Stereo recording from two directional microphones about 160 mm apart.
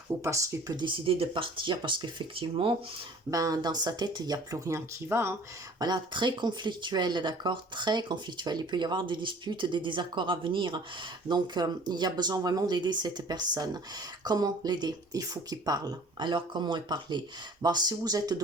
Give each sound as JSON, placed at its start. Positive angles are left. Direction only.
{"t": 0.2, "sound": "speech", "side_deg": -20}
{"t": 3.2, "sound": "speech", "side_deg": -20}
{"t": 5.8, "sound": "speech", "side_deg": -25}